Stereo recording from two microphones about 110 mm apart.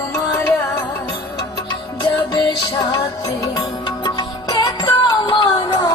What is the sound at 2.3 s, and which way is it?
Music, 45° left (ahead or behind).